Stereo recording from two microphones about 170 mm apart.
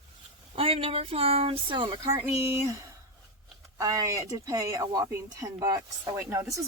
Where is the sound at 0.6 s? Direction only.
35° right (ahead or behind); by 2.8 s 20° right (ahead or behind).